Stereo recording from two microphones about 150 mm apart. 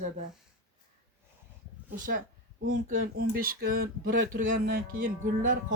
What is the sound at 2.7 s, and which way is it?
Speech, 60° right (ahead or behind).